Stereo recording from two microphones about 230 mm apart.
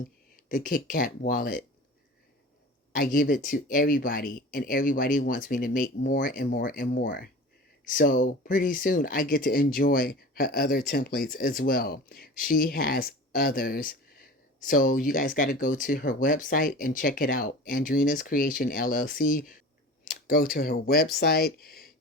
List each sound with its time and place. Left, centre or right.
0.4 s speech: left
2.9 s speech: left